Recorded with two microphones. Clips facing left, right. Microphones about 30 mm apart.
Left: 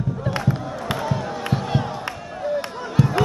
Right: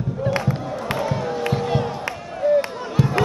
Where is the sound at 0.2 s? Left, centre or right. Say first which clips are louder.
Right 4 dB; centre.